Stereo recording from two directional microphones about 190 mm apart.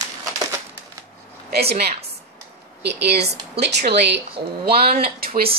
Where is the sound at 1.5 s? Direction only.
55° right (ahead or behind).